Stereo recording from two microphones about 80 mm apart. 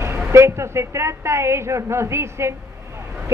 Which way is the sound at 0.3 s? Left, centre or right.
Right.